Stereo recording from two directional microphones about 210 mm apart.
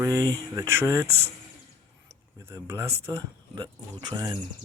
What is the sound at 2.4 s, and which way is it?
Speech, 10° right (ahead or behind).